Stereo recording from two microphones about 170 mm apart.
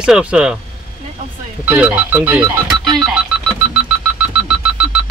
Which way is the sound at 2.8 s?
Centre (ahead or behind).